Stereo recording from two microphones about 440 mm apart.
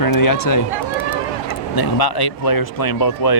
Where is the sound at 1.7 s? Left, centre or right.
Left.